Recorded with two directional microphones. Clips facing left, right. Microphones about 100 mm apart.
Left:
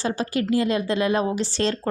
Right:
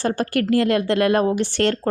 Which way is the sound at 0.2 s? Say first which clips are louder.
Right 3 dB; 65° right (ahead or behind).